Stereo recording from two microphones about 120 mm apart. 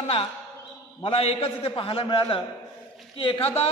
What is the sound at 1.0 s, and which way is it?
A man's voice, 50° left (ahead or behind).